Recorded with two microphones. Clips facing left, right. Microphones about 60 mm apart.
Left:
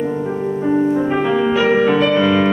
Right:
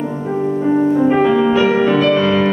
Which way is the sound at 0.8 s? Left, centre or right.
Centre.